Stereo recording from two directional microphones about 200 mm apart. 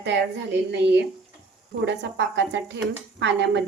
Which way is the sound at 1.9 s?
60° right (ahead or behind).